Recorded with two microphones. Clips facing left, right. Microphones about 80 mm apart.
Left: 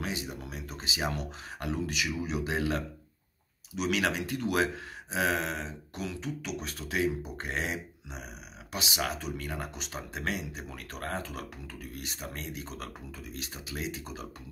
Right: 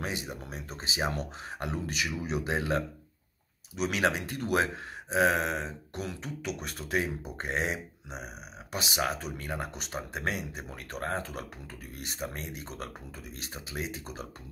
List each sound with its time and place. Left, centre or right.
0.0 s speech: right